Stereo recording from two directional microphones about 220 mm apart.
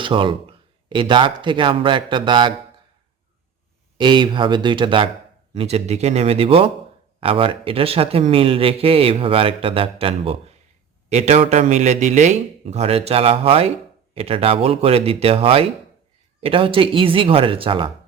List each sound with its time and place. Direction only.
0.0 s a man's voice: 25° right (ahead or behind)
3.9 s a man's voice: 20° right (ahead or behind)